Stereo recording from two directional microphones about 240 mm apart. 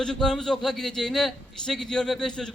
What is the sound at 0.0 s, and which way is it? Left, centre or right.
A man's voice, centre.